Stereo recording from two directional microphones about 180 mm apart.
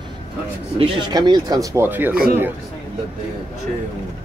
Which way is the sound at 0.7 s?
30° right (ahead or behind).